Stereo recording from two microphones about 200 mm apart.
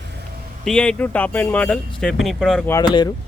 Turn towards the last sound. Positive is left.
turn(degrees=20)  # may be behind; listen again after turning